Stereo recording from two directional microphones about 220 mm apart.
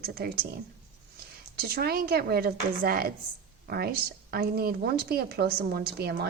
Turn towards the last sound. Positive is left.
turn(degrees=-45)  # may be behind; listen again after turning